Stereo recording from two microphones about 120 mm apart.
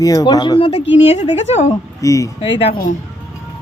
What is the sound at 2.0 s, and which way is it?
Speech, 25° left (ahead or behind).